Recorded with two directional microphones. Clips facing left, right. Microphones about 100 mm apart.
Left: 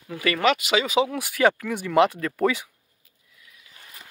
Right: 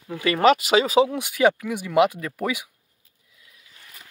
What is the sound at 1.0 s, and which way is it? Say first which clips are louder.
Speech: right 1 dB; 20° right (ahead or behind).